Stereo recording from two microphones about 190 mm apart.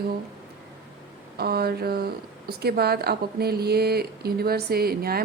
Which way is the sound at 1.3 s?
55° right (ahead or behind).